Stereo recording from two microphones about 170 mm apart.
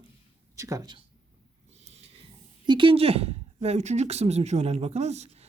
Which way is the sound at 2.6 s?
30° right (ahead or behind).